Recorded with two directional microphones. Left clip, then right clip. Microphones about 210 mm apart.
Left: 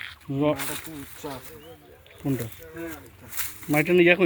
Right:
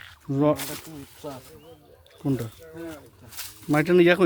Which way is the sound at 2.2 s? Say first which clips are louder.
Right 1 dB; 20° right (ahead or behind).